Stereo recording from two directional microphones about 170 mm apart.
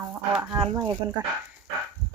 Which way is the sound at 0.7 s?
25° right (ahead or behind).